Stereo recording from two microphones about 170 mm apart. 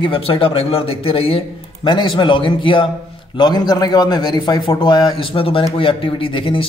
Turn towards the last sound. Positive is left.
turn(degrees=30)  # may be behind; listen again after turning